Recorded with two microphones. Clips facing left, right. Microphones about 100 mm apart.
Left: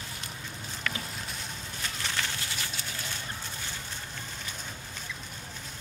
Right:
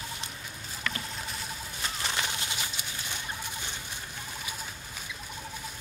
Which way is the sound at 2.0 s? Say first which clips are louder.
Right 1 dB; 20° right (ahead or behind).